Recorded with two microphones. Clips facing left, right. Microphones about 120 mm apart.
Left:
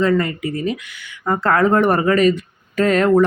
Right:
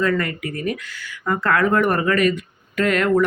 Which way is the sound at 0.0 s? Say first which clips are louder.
Left 4 dB; 25° left (ahead or behind).